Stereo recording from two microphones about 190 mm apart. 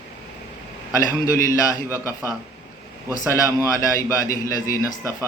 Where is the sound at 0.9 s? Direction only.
15° left (ahead or behind).